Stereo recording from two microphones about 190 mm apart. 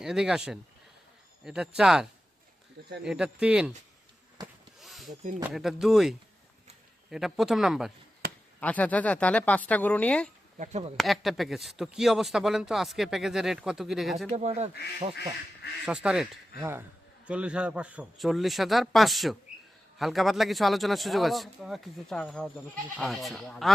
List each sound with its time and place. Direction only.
0.0 s speech: 5° right (ahead or behind)
4.4 s a sound: 20° right (ahead or behind)
4.8 s a sound: centre (ahead or behind)
5.4 s speech: centre (ahead or behind)
8.2 s chop: 55° right (ahead or behind)
8.6 s speech: 5° left (ahead or behind)
10.6 s speech: 35° right (ahead or behind)
10.9 s speech: centre (ahead or behind)
14.3 s speech: 35° right (ahead or behind)
15.9 s speech: 5° right (ahead or behind)